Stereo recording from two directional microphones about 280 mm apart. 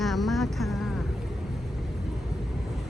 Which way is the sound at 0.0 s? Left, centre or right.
Centre.